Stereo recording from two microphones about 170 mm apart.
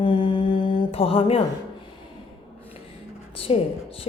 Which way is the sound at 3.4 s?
35° left (ahead or behind).